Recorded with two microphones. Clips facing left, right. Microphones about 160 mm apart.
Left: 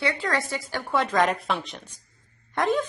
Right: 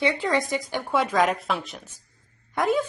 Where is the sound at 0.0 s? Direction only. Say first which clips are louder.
Right 3 dB; 15° right (ahead or behind).